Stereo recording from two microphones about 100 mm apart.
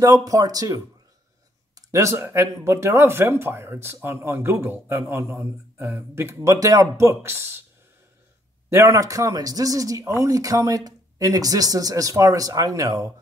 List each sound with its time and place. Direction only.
0.0 s speech: 35° right (ahead or behind)
8.6 s speech: 30° right (ahead or behind)